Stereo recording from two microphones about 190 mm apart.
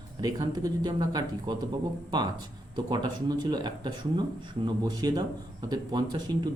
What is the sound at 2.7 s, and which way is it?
A man's voice, 20° right (ahead or behind).